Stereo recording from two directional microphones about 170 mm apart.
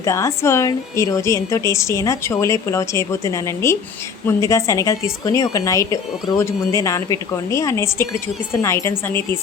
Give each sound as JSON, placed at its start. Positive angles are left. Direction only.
{"t": 0.0, "sound": "a woman's voice", "side_deg": 15}